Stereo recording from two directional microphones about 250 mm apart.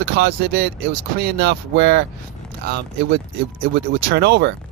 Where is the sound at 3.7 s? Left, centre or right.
Right.